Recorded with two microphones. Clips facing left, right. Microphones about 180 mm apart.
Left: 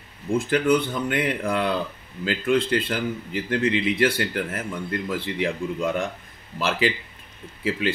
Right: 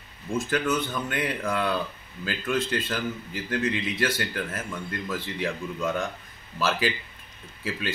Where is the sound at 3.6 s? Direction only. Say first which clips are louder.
Left 6 dB; 15° left (ahead or behind).